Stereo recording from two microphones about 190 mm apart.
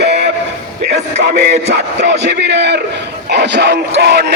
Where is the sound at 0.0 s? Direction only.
60° right (ahead or behind).